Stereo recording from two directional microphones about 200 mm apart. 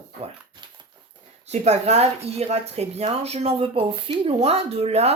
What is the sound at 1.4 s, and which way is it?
Speech, 35° right (ahead or behind).